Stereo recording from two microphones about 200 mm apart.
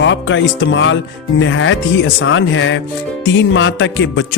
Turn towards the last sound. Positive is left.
turn(degrees=65)  # may be behind; listen again after turning